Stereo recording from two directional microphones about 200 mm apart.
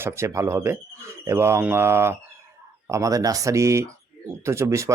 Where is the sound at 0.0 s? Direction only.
15° right (ahead or behind).